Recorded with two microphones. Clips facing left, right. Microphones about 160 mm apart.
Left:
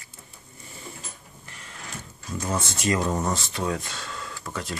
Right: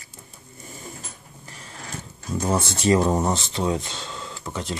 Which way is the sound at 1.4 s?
35° right (ahead or behind).